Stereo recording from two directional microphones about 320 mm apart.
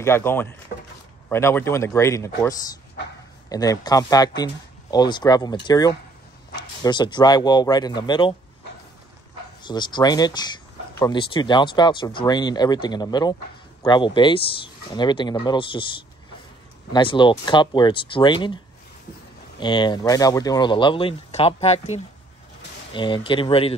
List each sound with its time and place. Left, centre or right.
0.0 s speech: centre
9.6 s speech: centre
19.6 s speech: centre